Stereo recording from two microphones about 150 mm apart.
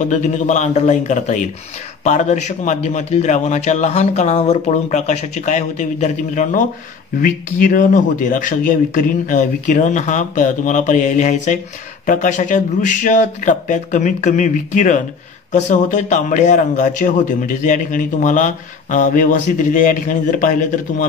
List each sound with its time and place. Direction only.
0.0 s a man's voice: 55° left (ahead or behind)